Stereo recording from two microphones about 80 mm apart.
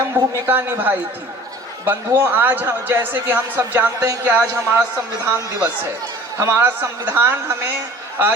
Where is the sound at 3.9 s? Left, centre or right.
Right.